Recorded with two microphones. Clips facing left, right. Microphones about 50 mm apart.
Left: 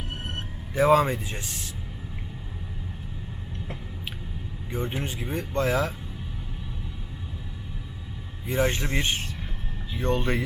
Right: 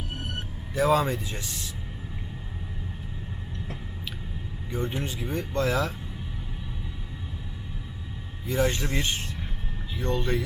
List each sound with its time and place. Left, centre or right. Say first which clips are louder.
0.3 s speech: even; left
4.7 s speech: even; left
8.4 s speech: left 1 dB; left
10.0 s speech: left 2 dB; left